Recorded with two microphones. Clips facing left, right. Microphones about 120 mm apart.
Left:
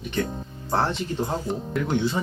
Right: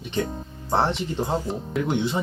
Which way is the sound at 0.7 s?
25° right (ahead or behind).